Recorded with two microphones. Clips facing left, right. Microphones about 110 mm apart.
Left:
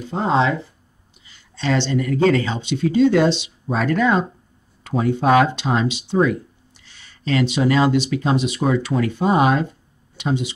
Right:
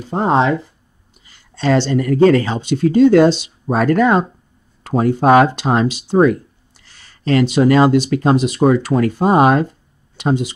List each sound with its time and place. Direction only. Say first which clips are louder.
0.1 s speech: right 4 dB; 50° right (ahead or behind)